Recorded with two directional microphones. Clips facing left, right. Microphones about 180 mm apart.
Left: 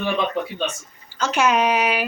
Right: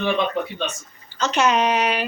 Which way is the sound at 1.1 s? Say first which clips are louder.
Even; 10° left (ahead or behind).